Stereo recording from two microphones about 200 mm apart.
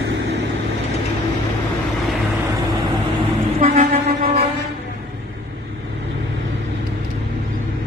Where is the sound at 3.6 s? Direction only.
35° right (ahead or behind).